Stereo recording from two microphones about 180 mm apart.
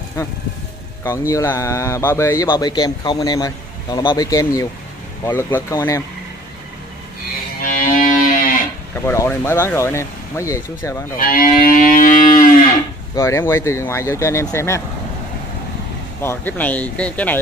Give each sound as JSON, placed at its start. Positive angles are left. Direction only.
{"t": 1.0, "sound": "speech", "side_deg": 15}
{"t": 7.6, "sound": "music", "side_deg": 50}
{"t": 9.0, "sound": "speech", "side_deg": 15}
{"t": 11.1, "sound": "moo", "side_deg": 50}
{"t": 13.1, "sound": "speech", "side_deg": 15}
{"t": 16.2, "sound": "speech", "side_deg": 10}